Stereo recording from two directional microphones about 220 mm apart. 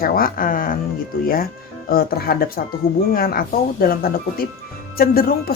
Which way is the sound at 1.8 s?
45° left (ahead or behind).